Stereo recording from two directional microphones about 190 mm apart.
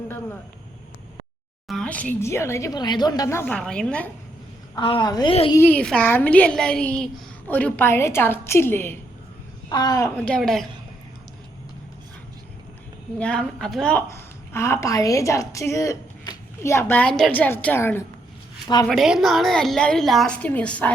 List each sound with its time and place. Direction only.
1.6 s a woman's voice: centre (ahead or behind)
4.7 s a woman's voice: 25° left (ahead or behind)
5.5 s a woman's voice: 10° left (ahead or behind)
10.2 s a woman's voice: 5° left (ahead or behind)
13.1 s a woman's voice: 5° left (ahead or behind)
18.9 s a woman's voice: centre (ahead or behind)